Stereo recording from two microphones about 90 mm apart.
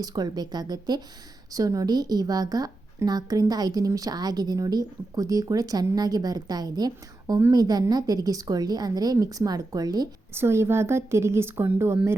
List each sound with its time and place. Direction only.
0.0 s a woman's voice: 50° right (ahead or behind)
10.3 s a woman's voice: 30° right (ahead or behind)